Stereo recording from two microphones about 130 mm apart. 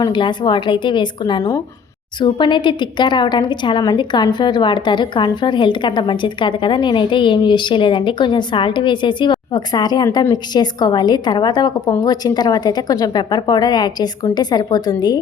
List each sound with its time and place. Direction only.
0.0 s a woman's voice: 35° left (ahead or behind)